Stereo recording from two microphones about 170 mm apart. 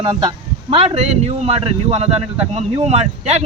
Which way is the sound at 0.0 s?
35° right (ahead or behind).